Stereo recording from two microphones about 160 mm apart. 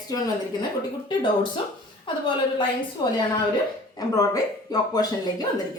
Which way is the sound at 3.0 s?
25° left (ahead or behind).